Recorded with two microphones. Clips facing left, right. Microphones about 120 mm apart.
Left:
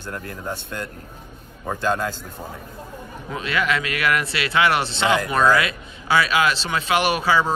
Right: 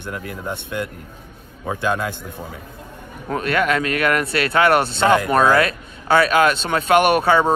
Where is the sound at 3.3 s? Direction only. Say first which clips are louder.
Right 4 dB; 50° right (ahead or behind).